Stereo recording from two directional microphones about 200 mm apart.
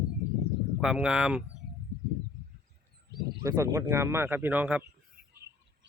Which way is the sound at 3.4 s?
15° right (ahead or behind).